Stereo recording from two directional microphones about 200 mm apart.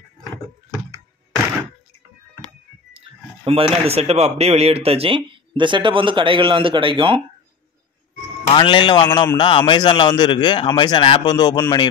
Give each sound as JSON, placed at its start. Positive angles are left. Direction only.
{"t": 2.9, "sound": "music", "side_deg": -30}
{"t": 3.8, "sound": "a man's voice", "side_deg": -30}
{"t": 8.5, "sound": "a man's voice", "side_deg": 25}